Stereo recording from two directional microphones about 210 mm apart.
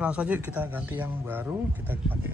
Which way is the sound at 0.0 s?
5° right (ahead or behind).